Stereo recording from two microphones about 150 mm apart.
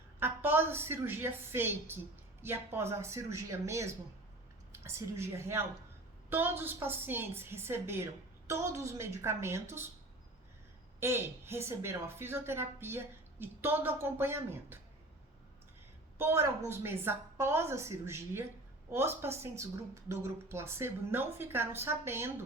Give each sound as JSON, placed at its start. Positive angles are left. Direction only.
{"t": 0.2, "sound": "a woman's voice", "side_deg": -15}
{"t": 11.0, "sound": "a woman's voice", "side_deg": -15}
{"t": 16.1, "sound": "a woman's voice", "side_deg": -15}